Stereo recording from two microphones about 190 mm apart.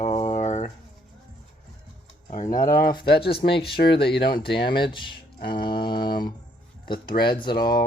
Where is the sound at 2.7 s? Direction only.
50° left (ahead or behind).